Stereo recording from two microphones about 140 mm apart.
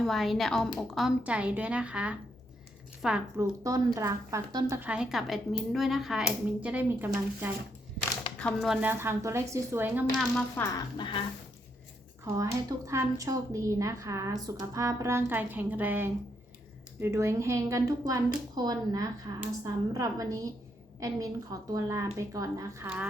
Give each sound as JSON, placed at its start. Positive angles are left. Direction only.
{"t": 0.0, "sound": "speech", "side_deg": 0}
{"t": 3.3, "sound": "speech", "side_deg": -25}
{"t": 4.7, "sound": "speech", "side_deg": -10}
{"t": 8.4, "sound": "speech", "side_deg": 5}
{"t": 8.9, "sound": "speech", "side_deg": -15}
{"t": 10.6, "sound": "speech", "side_deg": 15}
{"t": 10.9, "sound": "a sound", "side_deg": 35}
{"t": 12.2, "sound": "speech", "side_deg": -20}